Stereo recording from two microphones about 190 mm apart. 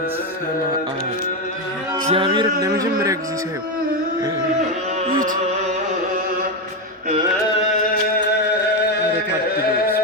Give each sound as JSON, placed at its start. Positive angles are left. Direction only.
{"t": 2.0, "sound": "music", "side_deg": -30}